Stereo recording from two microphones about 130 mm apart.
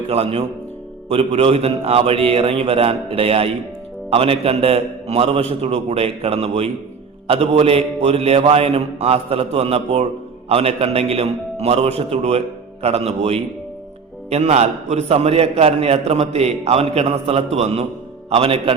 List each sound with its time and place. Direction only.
0.1 s a man's voice: 50° right (ahead or behind)